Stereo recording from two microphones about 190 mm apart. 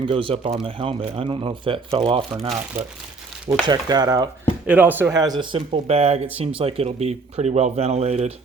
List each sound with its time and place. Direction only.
0.0 s speech: 25° right (ahead or behind)
3.7 s speech: 20° right (ahead or behind)
4.6 s speech: 10° right (ahead or behind); by 8.3 s 35° right (ahead or behind)